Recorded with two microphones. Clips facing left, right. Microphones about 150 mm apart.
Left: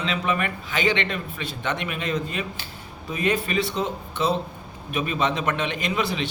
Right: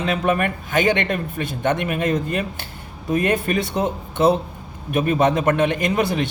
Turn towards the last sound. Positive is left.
turn(degrees=-50)  # may be behind; listen again after turning